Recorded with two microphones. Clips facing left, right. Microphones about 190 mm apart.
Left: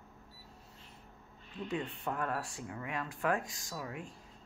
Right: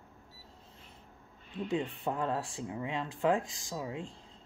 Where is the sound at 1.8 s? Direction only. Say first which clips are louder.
Right 3 dB; 20° right (ahead or behind).